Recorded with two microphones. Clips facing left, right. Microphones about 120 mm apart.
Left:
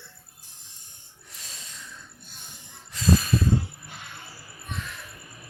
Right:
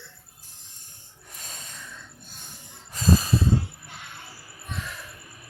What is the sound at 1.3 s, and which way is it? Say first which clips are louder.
Snort: right 3 dB; 50° right (ahead or behind).